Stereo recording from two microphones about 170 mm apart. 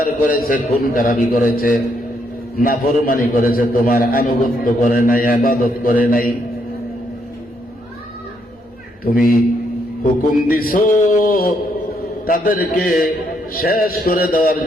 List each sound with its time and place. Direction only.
0.0 s a man's voice: 55° left (ahead or behind)
9.0 s a man's voice: 55° left (ahead or behind)
10.5 s a man's voice: 55° left (ahead or behind)